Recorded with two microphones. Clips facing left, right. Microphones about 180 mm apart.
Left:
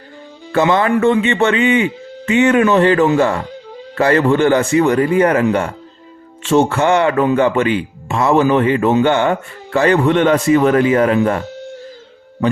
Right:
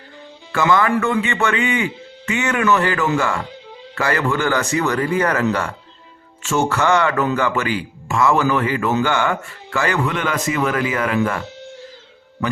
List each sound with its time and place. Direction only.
0.5 s a man's voice: 25° left (ahead or behind)